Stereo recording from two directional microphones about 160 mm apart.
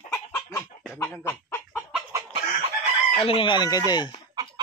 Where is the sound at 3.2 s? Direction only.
35° left (ahead or behind).